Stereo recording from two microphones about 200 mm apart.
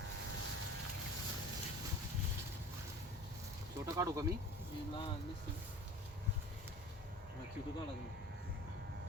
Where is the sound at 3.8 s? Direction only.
15° right (ahead or behind).